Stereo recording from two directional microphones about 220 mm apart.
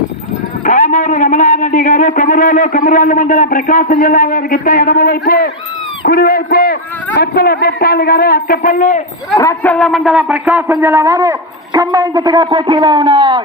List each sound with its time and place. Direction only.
0.6 s a man's voice: 30° left (ahead or behind)
9.4 s a man's voice: 10° left (ahead or behind)
9.7 s a man's voice: centre (ahead or behind); by 13.4 s 25° right (ahead or behind)